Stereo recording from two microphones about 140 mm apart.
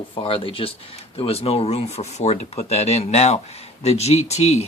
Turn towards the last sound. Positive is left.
turn(degrees=50)  # may be behind; listen again after turning